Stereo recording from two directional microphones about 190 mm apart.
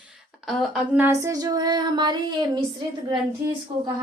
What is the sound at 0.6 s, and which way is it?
Female singing, 10° right (ahead or behind).